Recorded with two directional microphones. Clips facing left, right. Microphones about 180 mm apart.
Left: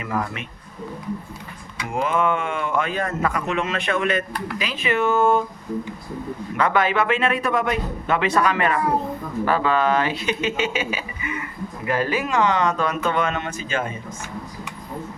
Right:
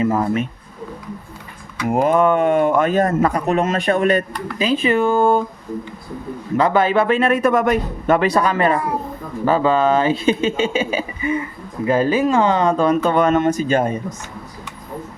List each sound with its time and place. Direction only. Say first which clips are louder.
0.0 s speech: right 9 dB; 30° right (ahead or behind)
1.9 s speech: right 7 dB; 40° right (ahead or behind)
6.7 s speech: right 4 dB; 30° right (ahead or behind)